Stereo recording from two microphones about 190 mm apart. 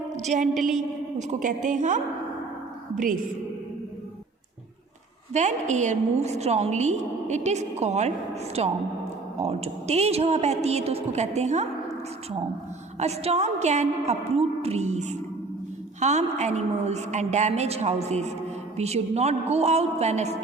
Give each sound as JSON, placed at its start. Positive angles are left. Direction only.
{"t": 0.2, "sound": "a woman's voice", "side_deg": -40}
{"t": 5.3, "sound": "a woman's voice", "side_deg": -40}
{"t": 13.0, "sound": "a woman's voice", "side_deg": -35}